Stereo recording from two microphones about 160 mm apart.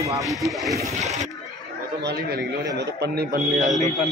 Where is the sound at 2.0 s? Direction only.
80° right.